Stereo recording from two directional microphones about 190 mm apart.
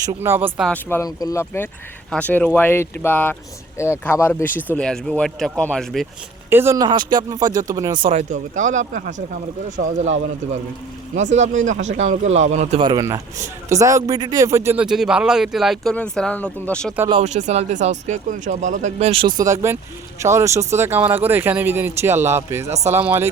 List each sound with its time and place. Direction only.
0.0 s speech: 15° right (ahead or behind)
0.7 s speech: 10° left (ahead or behind)
6.5 s speech: 15° right (ahead or behind)
8.3 s speech: 40° right (ahead or behind)
12.8 s a man's voice: 20° right (ahead or behind); by 16.9 s 5° left (ahead or behind)
17.1 s speech: 35° right (ahead or behind); by 23.3 s 10° right (ahead or behind)